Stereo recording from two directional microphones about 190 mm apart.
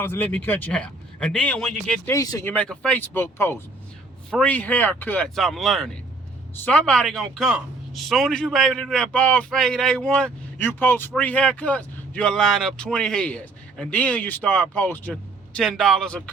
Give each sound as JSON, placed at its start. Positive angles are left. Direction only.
{"t": 0.0, "sound": "a man's voice", "side_deg": 10}
{"t": 2.1, "sound": "speech", "side_deg": 20}
{"t": 2.5, "sound": "a man's voice", "side_deg": 5}